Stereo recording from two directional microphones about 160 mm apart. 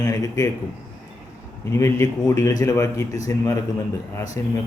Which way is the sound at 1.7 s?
20° left (ahead or behind).